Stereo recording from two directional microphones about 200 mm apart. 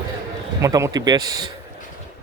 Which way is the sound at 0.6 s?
15° right (ahead or behind).